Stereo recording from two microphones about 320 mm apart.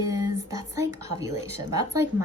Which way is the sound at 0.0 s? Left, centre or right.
Centre.